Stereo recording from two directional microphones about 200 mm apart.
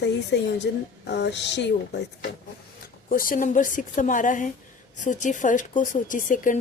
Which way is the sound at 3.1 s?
45° left (ahead or behind).